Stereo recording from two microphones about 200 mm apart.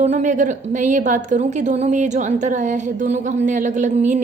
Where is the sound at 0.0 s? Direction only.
35° right (ahead or behind).